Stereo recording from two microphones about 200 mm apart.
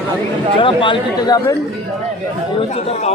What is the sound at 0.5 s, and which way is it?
Speech, 25° left (ahead or behind).